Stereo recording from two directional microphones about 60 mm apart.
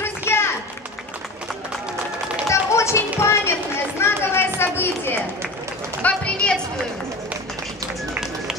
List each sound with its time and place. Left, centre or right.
0.0 s a sound: left
2.5 s children playing: left
6.0 s speech: centre